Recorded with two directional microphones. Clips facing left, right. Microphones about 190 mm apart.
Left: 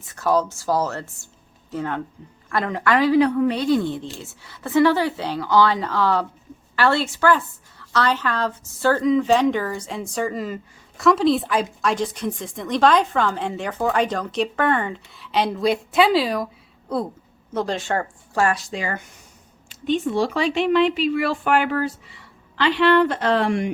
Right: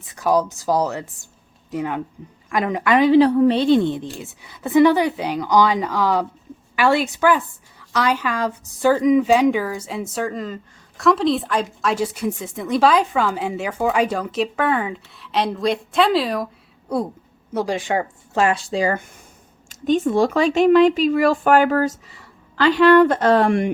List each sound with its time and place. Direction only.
0.0 s a woman's voice: 15° right (ahead or behind); by 16.5 s centre (ahead or behind)
16.9 s a woman's voice: 10° right (ahead or behind)
18.6 s speech: 35° right (ahead or behind); by 23.7 s 55° right (ahead or behind)